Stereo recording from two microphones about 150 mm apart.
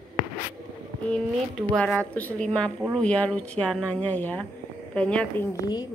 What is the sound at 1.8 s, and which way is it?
A woman's voice, 5° left (ahead or behind).